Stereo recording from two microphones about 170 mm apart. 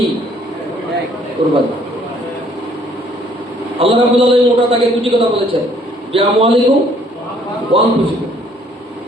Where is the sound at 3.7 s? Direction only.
35° right (ahead or behind).